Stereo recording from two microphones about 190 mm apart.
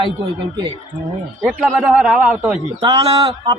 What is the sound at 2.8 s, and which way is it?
Speech, 25° right (ahead or behind).